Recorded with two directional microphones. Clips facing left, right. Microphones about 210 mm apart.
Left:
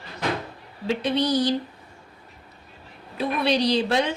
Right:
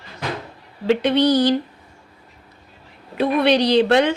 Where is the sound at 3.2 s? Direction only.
65° right (ahead or behind).